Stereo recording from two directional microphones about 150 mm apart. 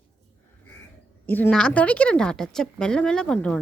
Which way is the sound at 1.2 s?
10° left (ahead or behind).